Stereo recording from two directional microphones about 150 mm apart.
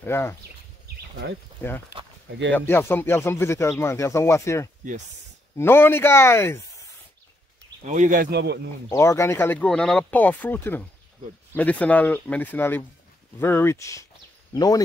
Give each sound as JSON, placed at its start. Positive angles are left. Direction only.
{"t": 0.0, "sound": "speech", "side_deg": 15}
{"t": 1.6, "sound": "speech", "side_deg": 10}
{"t": 7.8, "sound": "speech", "side_deg": -55}
{"t": 8.9, "sound": "speech", "side_deg": 20}